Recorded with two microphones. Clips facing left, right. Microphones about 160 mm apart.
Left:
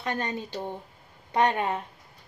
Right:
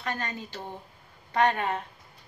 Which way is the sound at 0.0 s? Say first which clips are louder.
Left 3 dB; 20° left (ahead or behind).